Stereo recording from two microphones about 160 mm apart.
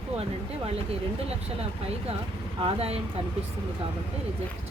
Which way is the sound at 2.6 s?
40° right (ahead or behind).